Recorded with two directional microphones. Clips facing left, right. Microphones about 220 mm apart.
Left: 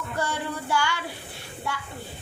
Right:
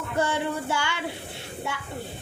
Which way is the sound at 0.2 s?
20° right (ahead or behind).